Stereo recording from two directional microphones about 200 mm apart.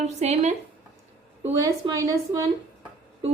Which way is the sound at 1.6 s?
15° right (ahead or behind).